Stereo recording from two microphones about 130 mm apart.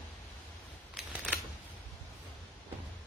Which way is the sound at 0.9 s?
10° right (ahead or behind).